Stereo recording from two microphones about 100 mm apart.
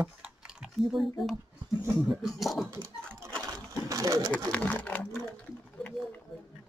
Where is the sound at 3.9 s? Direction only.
35° right (ahead or behind).